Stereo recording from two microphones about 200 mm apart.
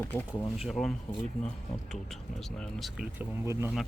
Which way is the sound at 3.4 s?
15° right (ahead or behind).